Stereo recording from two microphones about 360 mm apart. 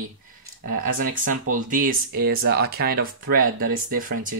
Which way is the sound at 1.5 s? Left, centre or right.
Right.